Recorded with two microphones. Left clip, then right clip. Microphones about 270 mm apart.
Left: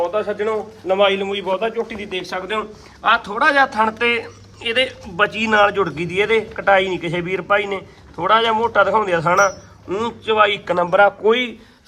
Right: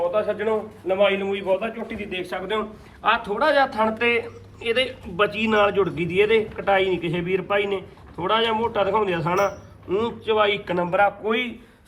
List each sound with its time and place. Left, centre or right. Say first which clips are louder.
0.1 s a man's voice: left 2 dB; left